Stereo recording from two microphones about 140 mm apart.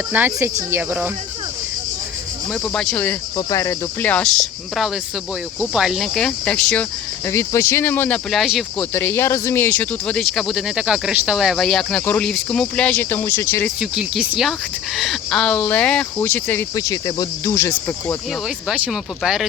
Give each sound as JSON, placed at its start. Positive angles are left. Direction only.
{"t": 0.1, "sound": "speech", "side_deg": -15}
{"t": 2.5, "sound": "speech", "side_deg": 5}
{"t": 3.3, "sound": "speech", "side_deg": 20}
{"t": 7.3, "sound": "speech", "side_deg": 20}
{"t": 8.3, "sound": "speech", "side_deg": 0}
{"t": 8.8, "sound": "speech", "side_deg": 15}
{"t": 13.7, "sound": "speech", "side_deg": -5}
{"t": 16.7, "sound": "speech", "side_deg": 25}
{"t": 18.4, "sound": "speech", "side_deg": -5}